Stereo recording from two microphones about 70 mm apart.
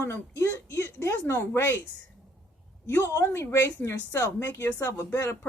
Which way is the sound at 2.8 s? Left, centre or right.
Left.